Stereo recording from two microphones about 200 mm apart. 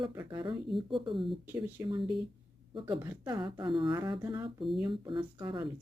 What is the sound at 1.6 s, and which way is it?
Speech, 20° right (ahead or behind).